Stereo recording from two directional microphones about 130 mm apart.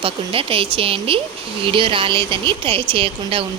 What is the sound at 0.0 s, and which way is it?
Speech, 45° right (ahead or behind).